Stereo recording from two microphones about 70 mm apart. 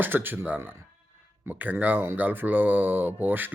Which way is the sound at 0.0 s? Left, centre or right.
Right.